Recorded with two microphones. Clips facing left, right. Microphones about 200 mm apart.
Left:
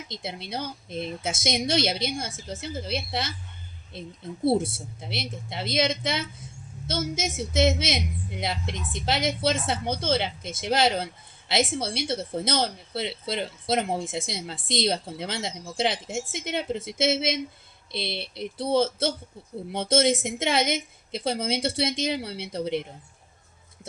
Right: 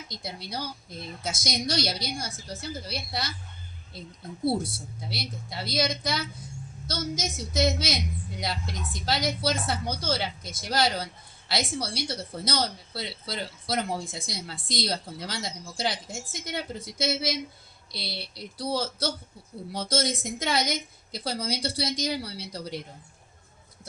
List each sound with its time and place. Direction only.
0.1 s a woman's voice: 25° left (ahead or behind)